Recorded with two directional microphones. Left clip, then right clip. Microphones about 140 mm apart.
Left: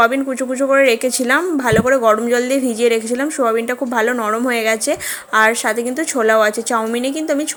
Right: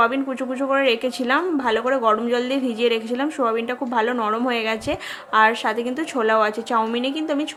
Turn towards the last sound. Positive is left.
turn(degrees=25)  # may be behind; listen again after turning